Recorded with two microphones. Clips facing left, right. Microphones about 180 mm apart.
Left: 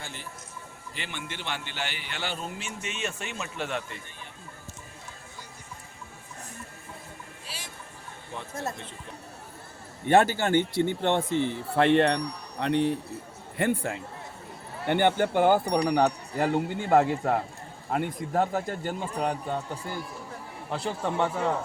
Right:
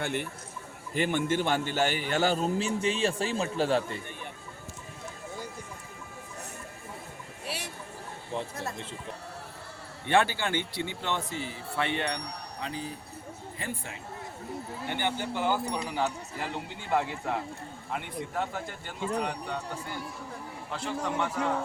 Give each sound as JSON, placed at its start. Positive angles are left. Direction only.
{"t": 0.0, "sound": "a man's voice", "side_deg": -60}
{"t": 0.9, "sound": "a man's voice", "side_deg": -45}
{"t": 7.4, "sound": "a sound", "side_deg": -65}
{"t": 10.1, "sound": "a man's voice", "side_deg": 45}
{"t": 13.6, "sound": "a man's voice", "side_deg": 65}
{"t": 20.7, "sound": "a man's voice", "side_deg": 35}